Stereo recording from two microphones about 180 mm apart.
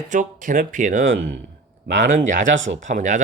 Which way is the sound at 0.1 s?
45° right (ahead or behind).